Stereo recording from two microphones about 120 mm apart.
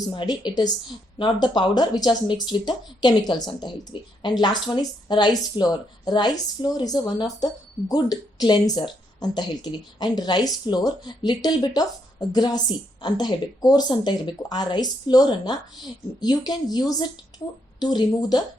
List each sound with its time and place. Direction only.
0.1 s speech: 40° left (ahead or behind)